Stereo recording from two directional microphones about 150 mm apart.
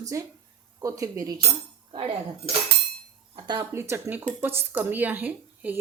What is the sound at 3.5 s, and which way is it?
Speech, 20° right (ahead or behind).